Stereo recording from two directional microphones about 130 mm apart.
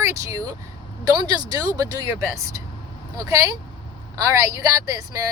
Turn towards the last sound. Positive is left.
turn(degrees=-25)  # may be behind; listen again after turning